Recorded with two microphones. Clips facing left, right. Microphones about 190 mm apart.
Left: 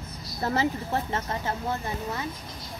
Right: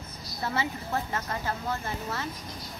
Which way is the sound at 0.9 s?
25° left (ahead or behind).